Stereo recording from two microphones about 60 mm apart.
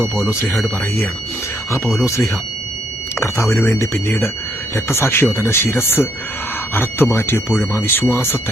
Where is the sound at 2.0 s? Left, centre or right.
Left.